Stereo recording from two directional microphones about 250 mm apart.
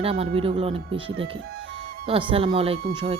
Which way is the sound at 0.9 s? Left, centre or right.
Right.